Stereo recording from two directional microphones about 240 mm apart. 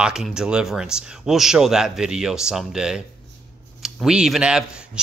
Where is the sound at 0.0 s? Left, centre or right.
Centre.